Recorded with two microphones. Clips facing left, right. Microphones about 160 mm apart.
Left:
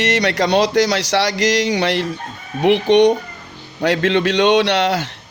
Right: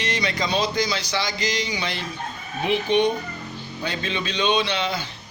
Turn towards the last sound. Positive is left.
turn(degrees=80)